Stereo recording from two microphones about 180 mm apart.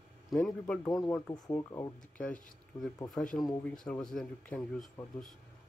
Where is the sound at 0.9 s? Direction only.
20° left (ahead or behind).